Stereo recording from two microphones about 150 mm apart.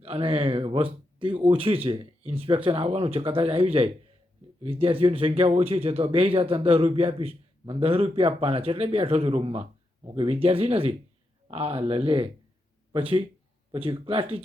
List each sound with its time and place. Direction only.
0.0 s speech: 40° right (ahead or behind)